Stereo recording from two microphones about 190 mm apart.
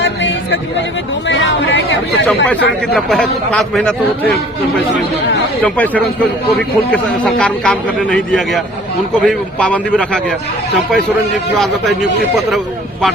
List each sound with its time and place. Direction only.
0.0 s a sound: 75° left (ahead or behind)
1.3 s speech: 70° left (ahead or behind)
2.9 s a man's voice: 5° left (ahead or behind)
5.6 s a man's voice: 10° left (ahead or behind)
11.5 s a man's voice: centre (ahead or behind)